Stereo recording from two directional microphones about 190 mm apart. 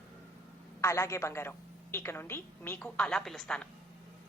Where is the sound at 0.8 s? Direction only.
15° left (ahead or behind).